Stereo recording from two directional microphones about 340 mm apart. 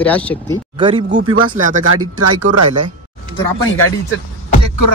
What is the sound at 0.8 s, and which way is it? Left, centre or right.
Speech, centre.